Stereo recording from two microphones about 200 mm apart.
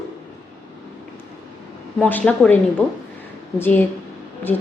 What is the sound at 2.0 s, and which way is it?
Speech, 5° left (ahead or behind).